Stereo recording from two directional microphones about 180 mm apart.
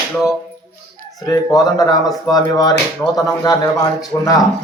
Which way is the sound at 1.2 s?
20° left (ahead or behind).